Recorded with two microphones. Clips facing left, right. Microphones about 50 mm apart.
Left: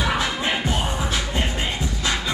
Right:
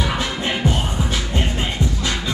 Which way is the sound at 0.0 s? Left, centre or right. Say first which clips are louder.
Even; centre.